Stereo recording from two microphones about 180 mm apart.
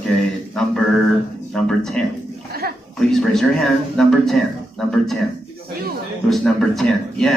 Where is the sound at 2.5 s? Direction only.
55° right (ahead or behind).